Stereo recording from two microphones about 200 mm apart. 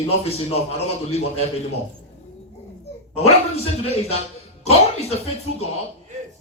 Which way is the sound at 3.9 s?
30° left (ahead or behind).